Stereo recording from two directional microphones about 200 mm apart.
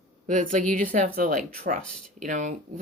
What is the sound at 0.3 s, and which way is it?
Speech, 40° right (ahead or behind).